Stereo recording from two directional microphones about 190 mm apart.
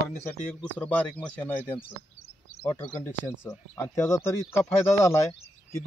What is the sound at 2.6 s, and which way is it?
Speech, 10° left (ahead or behind).